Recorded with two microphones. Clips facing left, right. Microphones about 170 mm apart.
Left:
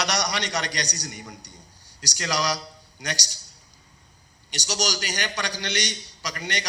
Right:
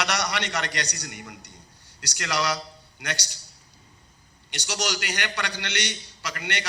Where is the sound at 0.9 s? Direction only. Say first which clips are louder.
Left 2 dB; 35° left (ahead or behind).